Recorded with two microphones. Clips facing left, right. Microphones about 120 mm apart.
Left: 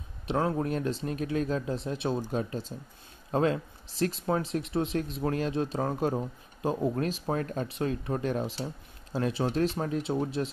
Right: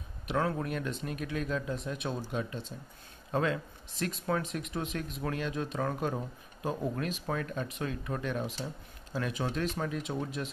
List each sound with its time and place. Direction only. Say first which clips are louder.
0.3 s speech: left 3 dB; 30° left (ahead or behind)